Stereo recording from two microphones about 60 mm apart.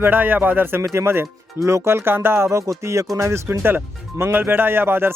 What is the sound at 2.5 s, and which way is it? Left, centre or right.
Speech, right.